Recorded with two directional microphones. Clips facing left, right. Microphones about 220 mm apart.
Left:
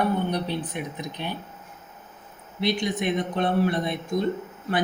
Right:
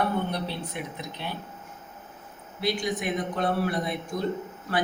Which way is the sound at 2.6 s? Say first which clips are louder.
Left 3 dB; 20° left (ahead or behind).